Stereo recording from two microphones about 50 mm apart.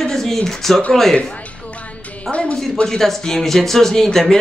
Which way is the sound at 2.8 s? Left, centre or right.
Centre.